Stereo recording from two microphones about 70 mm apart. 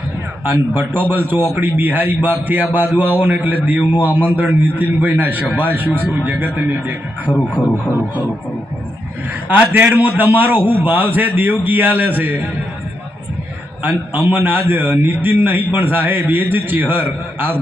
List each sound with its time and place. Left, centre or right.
0.4 s a man's voice: right
7.3 s speech: centre
9.5 s a man's voice: right
13.8 s a man's voice: right